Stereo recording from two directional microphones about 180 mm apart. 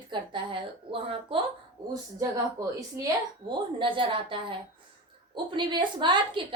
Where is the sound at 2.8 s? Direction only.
20° right (ahead or behind).